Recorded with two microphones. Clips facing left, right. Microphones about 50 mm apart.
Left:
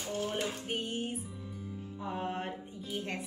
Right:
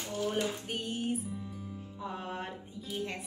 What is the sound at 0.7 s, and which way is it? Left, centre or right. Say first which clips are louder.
Speech: right 1 dB; left.